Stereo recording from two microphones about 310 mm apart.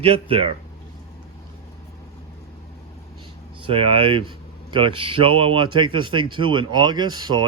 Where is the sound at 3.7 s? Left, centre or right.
Centre.